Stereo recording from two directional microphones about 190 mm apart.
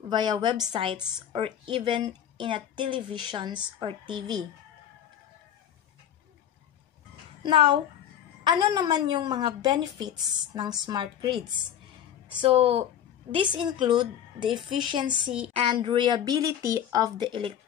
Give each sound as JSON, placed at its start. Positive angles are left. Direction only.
{"t": 0.1, "sound": "a woman's voice", "side_deg": -25}
{"t": 7.4, "sound": "a woman's voice", "side_deg": -25}